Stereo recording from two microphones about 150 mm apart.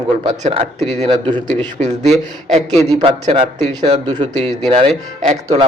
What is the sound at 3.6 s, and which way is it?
Speech, 45° right (ahead or behind).